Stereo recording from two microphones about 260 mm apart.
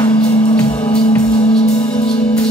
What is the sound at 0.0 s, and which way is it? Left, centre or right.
Music, centre.